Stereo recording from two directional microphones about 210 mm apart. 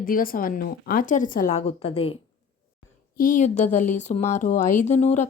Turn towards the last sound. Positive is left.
turn(degrees=35)  # may be behind; listen again after turning